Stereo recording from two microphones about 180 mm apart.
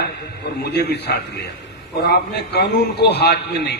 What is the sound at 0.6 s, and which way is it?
A man's voice, 65° left (ahead or behind).